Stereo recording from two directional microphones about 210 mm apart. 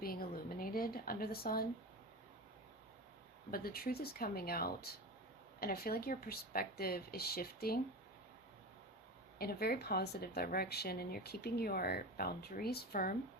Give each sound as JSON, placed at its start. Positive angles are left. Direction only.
{"t": 0.0, "sound": "a sound", "side_deg": 45}
{"t": 3.5, "sound": "speech", "side_deg": 45}
{"t": 9.4, "sound": "speech", "side_deg": 45}